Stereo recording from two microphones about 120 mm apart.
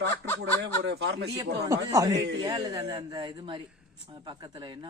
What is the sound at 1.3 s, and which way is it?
A man's voice, 30° right (ahead or behind).